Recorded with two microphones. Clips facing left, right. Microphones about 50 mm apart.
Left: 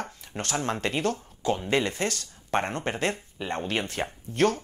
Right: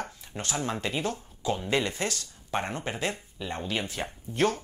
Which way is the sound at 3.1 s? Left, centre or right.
Left.